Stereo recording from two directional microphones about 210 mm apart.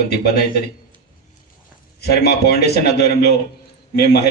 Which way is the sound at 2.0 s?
50° left (ahead or behind).